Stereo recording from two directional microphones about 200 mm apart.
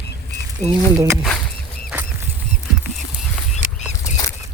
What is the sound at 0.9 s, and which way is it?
Speech, 15° right (ahead or behind).